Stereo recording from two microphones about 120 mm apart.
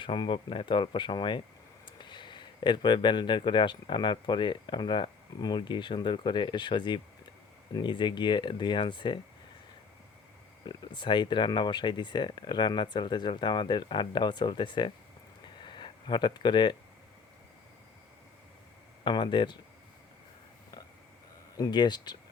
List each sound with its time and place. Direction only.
0.0 s speech: 40° left (ahead or behind)
10.6 s speech: 40° left (ahead or behind)
15.5 s a sound: 40° left (ahead or behind)
19.0 s speech: 40° left (ahead or behind)
21.5 s speech: 35° left (ahead or behind)